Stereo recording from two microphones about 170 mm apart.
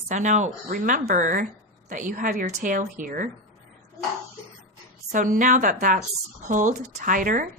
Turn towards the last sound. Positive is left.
turn(degrees=-55)  # may be behind; listen again after turning